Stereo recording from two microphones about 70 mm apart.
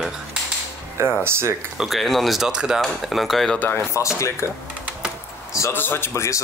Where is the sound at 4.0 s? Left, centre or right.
Left.